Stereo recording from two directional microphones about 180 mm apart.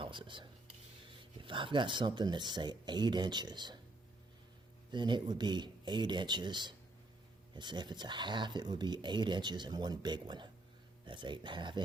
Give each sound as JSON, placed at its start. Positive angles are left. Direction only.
{"t": 0.0, "sound": "speech", "side_deg": -25}
{"t": 4.9, "sound": "speech", "side_deg": -25}